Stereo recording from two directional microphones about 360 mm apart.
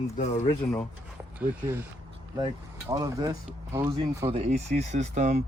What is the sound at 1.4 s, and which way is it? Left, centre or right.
Speech, centre.